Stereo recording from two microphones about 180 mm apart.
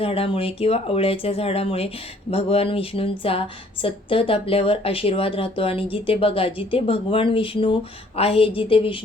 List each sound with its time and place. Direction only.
0.0 s speech: 30° left (ahead or behind)